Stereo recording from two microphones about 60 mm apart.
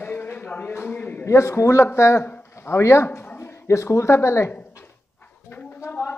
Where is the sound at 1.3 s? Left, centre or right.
Left.